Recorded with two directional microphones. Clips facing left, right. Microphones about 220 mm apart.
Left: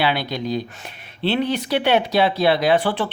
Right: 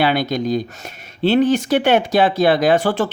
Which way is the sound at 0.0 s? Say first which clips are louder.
Right 5 dB; 45° right (ahead or behind).